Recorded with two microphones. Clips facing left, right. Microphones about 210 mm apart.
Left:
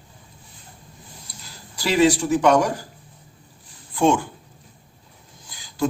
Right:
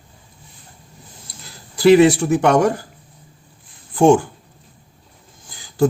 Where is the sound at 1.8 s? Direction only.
55° right (ahead or behind).